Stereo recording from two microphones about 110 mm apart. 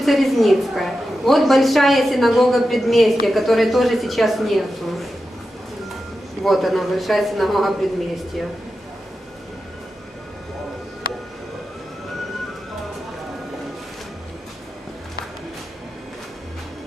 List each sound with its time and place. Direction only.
0.0 s a woman's voice: centre (ahead or behind)
6.4 s a woman's voice: centre (ahead or behind)